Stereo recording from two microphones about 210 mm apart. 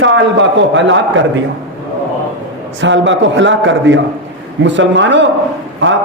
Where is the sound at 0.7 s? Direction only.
60° right (ahead or behind).